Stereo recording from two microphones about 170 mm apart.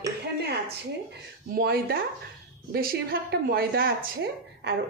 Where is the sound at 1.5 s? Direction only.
65° right (ahead or behind).